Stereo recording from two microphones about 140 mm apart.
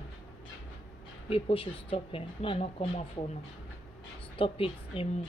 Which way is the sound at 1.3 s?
40° left (ahead or behind).